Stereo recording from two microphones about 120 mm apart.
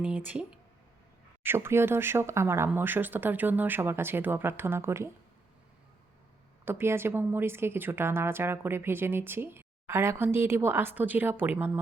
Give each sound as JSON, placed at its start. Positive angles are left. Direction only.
{"t": 0.0, "sound": "speech", "side_deg": -10}
{"t": 1.5, "sound": "speech", "side_deg": -20}
{"t": 6.7, "sound": "speech", "side_deg": -20}